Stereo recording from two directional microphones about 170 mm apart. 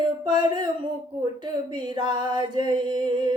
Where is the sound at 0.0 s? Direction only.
25° right (ahead or behind).